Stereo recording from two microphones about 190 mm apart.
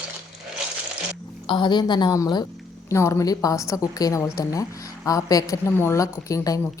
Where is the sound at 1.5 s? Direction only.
25° left (ahead or behind).